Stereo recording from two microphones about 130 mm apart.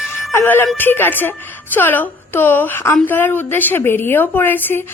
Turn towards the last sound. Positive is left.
turn(degrees=15)  # may be behind; listen again after turning